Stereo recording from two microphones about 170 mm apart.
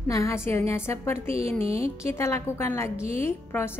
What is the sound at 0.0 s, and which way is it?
A woman's voice, 15° left (ahead or behind).